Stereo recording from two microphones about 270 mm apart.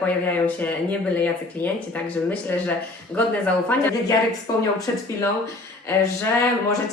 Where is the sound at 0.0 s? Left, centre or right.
Centre.